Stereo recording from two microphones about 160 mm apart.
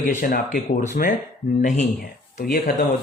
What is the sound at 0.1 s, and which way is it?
Speech, 50° left (ahead or behind).